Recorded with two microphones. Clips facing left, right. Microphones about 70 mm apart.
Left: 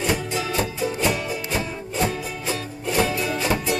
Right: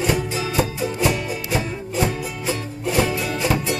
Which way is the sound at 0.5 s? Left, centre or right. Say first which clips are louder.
Right 4 dB; centre.